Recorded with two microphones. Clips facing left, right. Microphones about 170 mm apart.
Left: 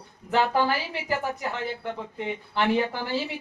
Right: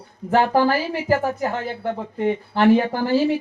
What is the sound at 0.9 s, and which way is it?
Speech, 45° right (ahead or behind).